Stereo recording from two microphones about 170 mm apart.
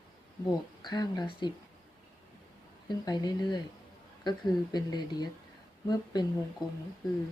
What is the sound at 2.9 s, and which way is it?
Speech, 25° left (ahead or behind).